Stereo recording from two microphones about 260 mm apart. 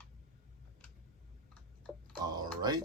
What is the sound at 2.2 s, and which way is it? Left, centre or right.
Speech, centre.